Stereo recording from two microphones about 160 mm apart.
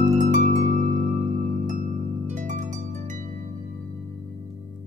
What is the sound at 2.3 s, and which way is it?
Harp, 50° right (ahead or behind).